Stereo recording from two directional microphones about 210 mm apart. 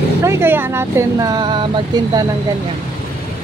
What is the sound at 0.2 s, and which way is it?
Speech, 10° right (ahead or behind).